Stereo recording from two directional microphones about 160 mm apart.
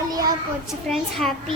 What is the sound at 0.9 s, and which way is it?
Speech, centre (ahead or behind).